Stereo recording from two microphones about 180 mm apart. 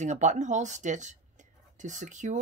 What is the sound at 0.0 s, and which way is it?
Speech, 40° right (ahead or behind).